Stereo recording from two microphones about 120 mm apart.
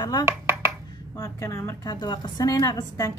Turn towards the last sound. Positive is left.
turn(degrees=35)  # may be behind; listen again after turning